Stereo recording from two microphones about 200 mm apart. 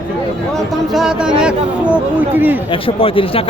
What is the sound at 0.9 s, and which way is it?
Speech, 5° right (ahead or behind).